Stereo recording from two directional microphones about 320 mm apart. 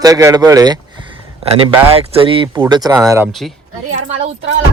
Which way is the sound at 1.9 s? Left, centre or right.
Centre.